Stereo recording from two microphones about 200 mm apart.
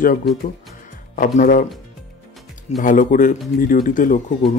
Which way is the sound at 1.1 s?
40° left (ahead or behind).